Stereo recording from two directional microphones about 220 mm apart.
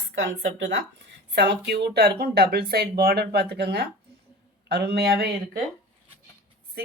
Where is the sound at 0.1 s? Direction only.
55° right (ahead or behind).